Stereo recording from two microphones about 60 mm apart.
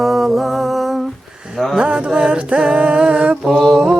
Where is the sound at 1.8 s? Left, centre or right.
Centre.